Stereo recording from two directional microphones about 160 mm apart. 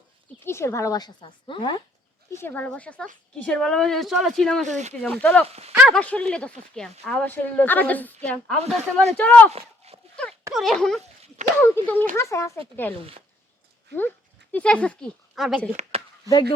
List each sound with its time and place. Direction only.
0.4 s a woman's voice: 15° left (ahead or behind)
2.3 s a woman's voice: 15° left (ahead or behind)
4.6 s speech: 45° right (ahead or behind)
5.0 s a woman's voice: 10° left (ahead or behind)
5.5 s speech: 40° right (ahead or behind)
5.9 s a woman's voice: 5° left (ahead or behind)
9.5 s a sound: 40° right (ahead or behind)
10.5 s a woman's voice: centre (ahead or behind); by 12.5 s 20° left (ahead or behind)
14.5 s a woman's voice: 5° left (ahead or behind)
15.7 s speech: 45° right (ahead or behind)
16.3 s speech: 20° right (ahead or behind)